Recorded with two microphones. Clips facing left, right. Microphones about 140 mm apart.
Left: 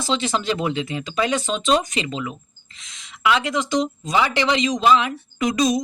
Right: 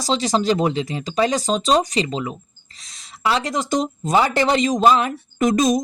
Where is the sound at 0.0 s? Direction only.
40° right (ahead or behind).